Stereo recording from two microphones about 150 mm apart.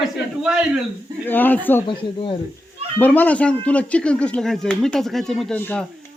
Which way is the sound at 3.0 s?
10° left (ahead or behind).